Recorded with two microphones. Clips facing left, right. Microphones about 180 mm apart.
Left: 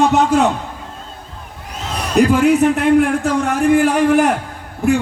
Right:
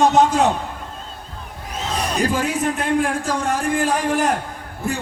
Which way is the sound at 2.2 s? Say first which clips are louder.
Left 11 dB; 65° left (ahead or behind).